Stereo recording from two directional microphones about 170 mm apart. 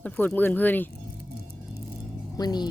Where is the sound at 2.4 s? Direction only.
25° left (ahead or behind).